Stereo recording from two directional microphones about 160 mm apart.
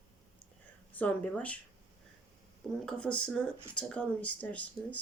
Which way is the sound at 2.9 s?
5° left (ahead or behind).